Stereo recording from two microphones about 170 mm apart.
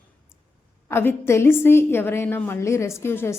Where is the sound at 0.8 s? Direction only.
15° left (ahead or behind).